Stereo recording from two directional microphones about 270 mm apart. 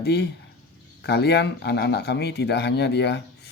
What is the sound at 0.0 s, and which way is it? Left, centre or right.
Speech, left.